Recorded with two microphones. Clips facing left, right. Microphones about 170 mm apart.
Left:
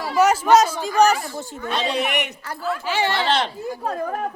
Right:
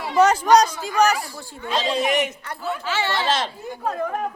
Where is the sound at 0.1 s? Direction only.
5° left (ahead or behind).